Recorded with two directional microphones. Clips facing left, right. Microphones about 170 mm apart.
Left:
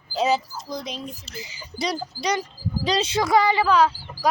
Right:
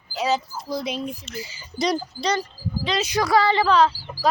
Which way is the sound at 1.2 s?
25° left (ahead or behind).